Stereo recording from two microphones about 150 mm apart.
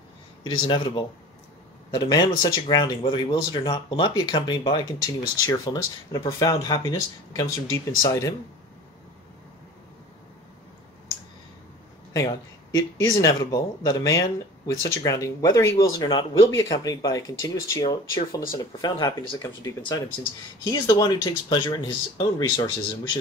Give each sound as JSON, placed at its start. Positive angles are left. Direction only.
{"t": 0.4, "sound": "speech", "side_deg": 35}
{"t": 12.2, "sound": "speech", "side_deg": 25}